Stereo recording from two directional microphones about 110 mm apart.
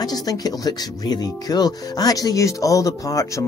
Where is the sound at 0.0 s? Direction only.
35° left (ahead or behind).